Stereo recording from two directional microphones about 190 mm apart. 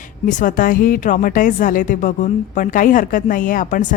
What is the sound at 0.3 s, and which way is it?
Speech, 45° left (ahead or behind).